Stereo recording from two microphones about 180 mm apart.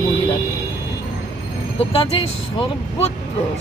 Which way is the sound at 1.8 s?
35° left (ahead or behind).